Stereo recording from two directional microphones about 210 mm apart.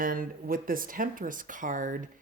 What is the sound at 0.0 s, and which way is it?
Speech, 40° right (ahead or behind).